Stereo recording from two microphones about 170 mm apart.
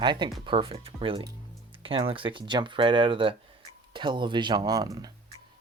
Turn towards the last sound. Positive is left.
turn(degrees=-20)  # may be behind; listen again after turning